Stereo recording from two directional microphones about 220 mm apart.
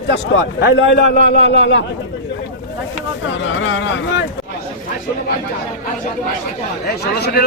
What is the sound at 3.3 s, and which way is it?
Speech, 60° left (ahead or behind).